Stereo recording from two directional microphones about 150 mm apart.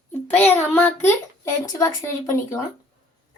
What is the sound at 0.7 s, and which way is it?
Speech, 10° left (ahead or behind).